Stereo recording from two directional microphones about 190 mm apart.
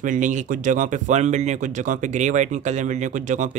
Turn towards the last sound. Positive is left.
turn(degrees=-40)  # may be behind; listen again after turning